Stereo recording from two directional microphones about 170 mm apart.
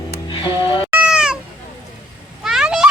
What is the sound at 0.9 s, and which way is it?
Cat, 10° right (ahead or behind).